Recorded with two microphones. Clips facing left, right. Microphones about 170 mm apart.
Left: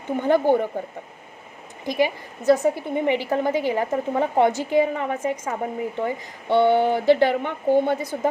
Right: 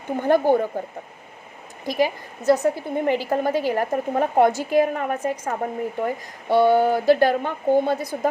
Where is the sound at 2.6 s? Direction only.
20° left (ahead or behind).